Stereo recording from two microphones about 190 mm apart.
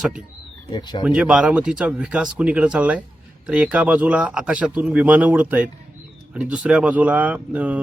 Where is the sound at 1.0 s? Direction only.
5° right (ahead or behind).